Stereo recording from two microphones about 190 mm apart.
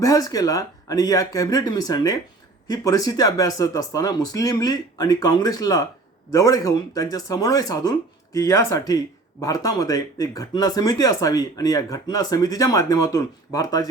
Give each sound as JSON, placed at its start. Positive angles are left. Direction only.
{"t": 0.0, "sound": "speech", "side_deg": 20}